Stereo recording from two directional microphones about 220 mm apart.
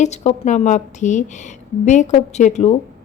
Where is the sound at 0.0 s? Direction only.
30° left (ahead or behind).